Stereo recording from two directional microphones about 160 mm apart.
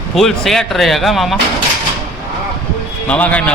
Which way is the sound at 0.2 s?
Centre (ahead or behind).